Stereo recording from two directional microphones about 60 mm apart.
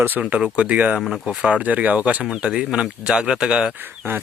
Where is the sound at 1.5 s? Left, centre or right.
Right.